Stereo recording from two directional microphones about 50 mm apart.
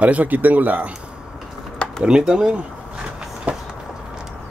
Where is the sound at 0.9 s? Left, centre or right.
Right.